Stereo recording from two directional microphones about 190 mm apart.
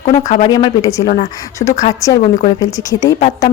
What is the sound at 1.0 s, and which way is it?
Speech, 40° left (ahead or behind).